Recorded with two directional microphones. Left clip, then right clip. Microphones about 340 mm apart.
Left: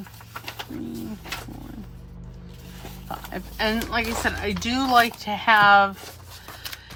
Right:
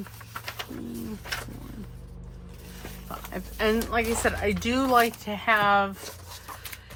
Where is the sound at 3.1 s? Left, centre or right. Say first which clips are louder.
Left 4 dB; centre.